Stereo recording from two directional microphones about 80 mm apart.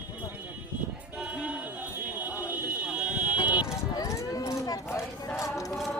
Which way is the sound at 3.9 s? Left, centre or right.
Left.